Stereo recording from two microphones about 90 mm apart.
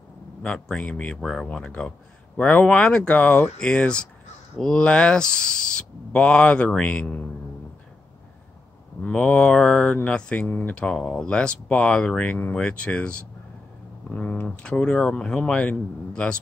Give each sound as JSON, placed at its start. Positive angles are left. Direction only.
{"t": 0.4, "sound": "speech", "side_deg": 10}
{"t": 1.2, "sound": "speech", "side_deg": 0}
{"t": 9.0, "sound": "speech", "side_deg": 15}
{"t": 10.4, "sound": "speech", "side_deg": 25}
{"t": 10.7, "sound": "speech", "side_deg": 10}